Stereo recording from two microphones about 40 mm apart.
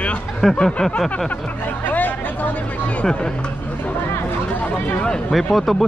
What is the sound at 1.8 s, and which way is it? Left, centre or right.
Chatter, left.